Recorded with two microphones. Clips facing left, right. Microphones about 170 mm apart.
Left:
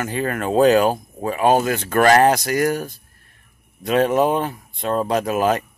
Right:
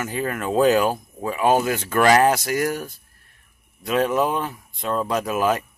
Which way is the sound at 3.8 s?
40° left (ahead or behind).